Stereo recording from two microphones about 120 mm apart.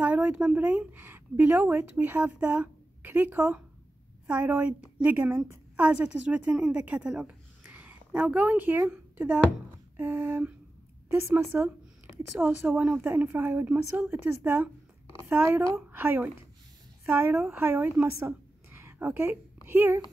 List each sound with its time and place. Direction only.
0.0 s a woman's voice: 10° right (ahead or behind)